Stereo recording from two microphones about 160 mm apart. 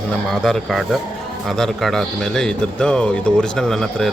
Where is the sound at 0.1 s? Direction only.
5° left (ahead or behind).